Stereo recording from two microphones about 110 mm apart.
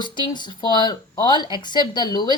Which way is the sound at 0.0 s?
45° left (ahead or behind).